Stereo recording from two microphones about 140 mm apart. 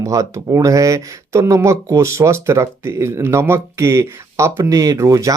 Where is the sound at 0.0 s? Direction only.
25° right (ahead or behind).